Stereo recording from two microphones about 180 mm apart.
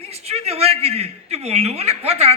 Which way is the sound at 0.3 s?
35° right (ahead or behind).